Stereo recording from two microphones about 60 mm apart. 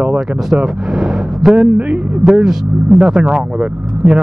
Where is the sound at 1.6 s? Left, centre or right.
Right.